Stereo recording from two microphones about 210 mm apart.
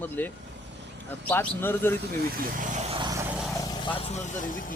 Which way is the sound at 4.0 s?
30° left (ahead or behind).